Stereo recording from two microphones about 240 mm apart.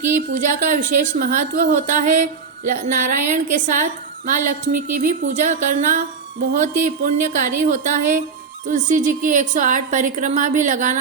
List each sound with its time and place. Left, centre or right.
0.1 s a woman's voice: right